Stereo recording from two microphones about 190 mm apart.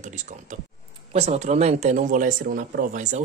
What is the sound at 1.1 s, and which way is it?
Speech, 35° right (ahead or behind).